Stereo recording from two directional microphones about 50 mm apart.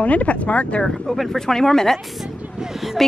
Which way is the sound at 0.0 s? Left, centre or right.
Left.